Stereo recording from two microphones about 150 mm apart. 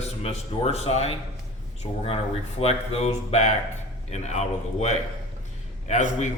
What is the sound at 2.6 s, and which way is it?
Speech, 45° left (ahead or behind).